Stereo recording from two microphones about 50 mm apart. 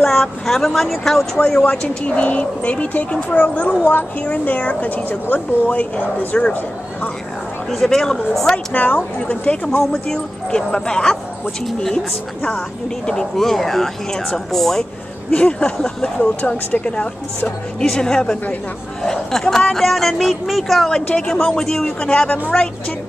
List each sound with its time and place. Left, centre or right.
0.0 s speech: centre
1.4 s a woman's voice: centre
7.7 s speech: centre
8.7 s a woman's voice: left
10.0 s speech: centre
13.0 s speech: centre
15.3 s speech: centre
16.3 s a woman's voice: left
16.8 s speech: left; by 20.9 s centre
20.9 s speech: centre